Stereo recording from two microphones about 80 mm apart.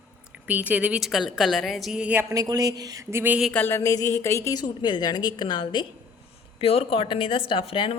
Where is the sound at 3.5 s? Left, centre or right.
Left.